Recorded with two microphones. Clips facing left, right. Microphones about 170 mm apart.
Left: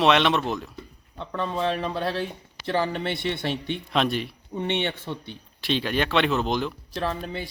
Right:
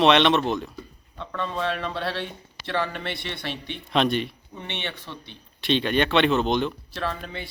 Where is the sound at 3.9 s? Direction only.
Centre (ahead or behind).